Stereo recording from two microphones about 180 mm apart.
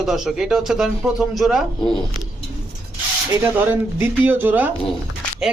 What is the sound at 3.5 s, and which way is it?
A man's voice, 10° right (ahead or behind).